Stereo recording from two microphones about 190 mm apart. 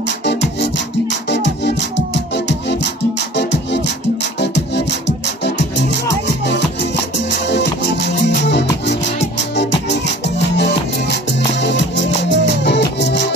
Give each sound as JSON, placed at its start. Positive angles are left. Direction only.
{"t": 0.2, "sound": "music", "side_deg": 65}